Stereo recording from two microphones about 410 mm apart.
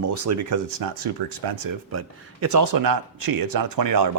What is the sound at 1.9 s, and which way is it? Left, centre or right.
Speech, right.